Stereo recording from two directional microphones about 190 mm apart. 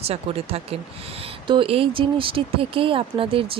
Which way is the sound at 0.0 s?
30° right (ahead or behind).